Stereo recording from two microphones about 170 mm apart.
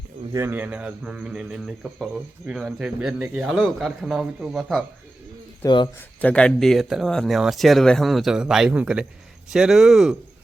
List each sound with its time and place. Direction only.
0.3 s speech: 15° right (ahead or behind)
5.6 s speech: 25° left (ahead or behind)
6.2 s speech: 5° left (ahead or behind)